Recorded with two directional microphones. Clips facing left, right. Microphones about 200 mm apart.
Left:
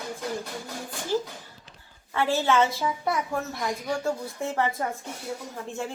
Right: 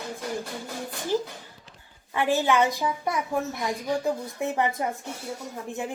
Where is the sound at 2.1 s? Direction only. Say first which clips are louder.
Even; 15° right (ahead or behind).